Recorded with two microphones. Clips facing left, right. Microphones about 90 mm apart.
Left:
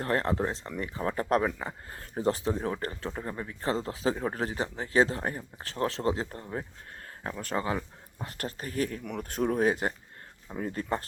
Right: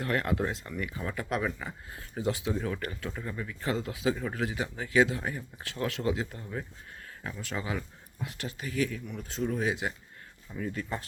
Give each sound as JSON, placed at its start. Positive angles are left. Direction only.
{"t": 0.0, "sound": "speech", "side_deg": 35}
{"t": 9.0, "sound": "speech", "side_deg": 60}